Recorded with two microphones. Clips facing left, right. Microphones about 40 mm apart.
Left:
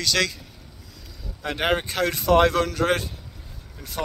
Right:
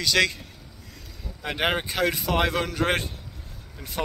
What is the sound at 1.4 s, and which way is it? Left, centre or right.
Speech, centre.